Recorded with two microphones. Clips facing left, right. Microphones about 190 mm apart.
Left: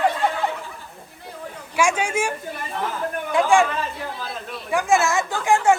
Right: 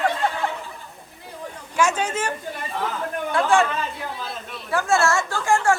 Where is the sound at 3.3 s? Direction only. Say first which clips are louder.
Left 2 dB; 15° left (ahead or behind).